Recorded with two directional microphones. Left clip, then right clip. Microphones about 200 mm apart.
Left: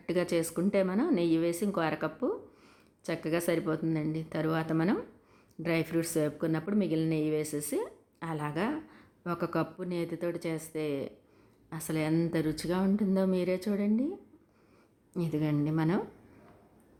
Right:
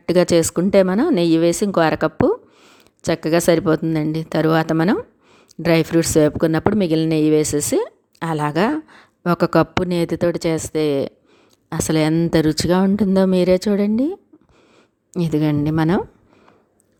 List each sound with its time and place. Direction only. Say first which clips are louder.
0.0 s a woman's voice: right 15 dB; 45° right (ahead or behind)